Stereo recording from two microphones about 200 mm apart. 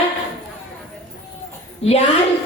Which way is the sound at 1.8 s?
30° left (ahead or behind).